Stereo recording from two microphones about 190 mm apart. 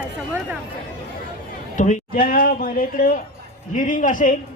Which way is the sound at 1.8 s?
40° left (ahead or behind).